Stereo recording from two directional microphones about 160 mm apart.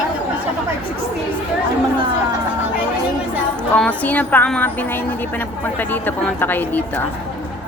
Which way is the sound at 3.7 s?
10° left (ahead or behind).